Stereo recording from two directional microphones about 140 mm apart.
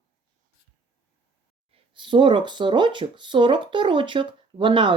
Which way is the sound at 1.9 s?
35° right (ahead or behind).